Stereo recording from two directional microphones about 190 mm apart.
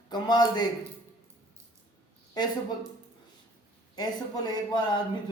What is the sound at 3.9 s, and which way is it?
Speech, 20° left (ahead or behind).